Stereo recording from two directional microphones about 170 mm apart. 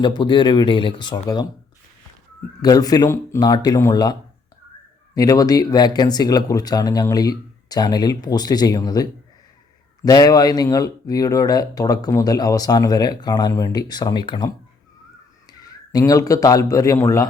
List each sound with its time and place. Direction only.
0.0 s speech: 25° left (ahead or behind)
2.6 s speech: 20° left (ahead or behind)